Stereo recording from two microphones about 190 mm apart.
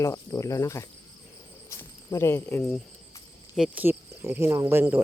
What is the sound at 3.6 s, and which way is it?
Speech, 10° right (ahead or behind).